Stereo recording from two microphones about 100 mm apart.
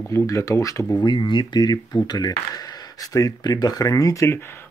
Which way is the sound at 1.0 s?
50° left (ahead or behind).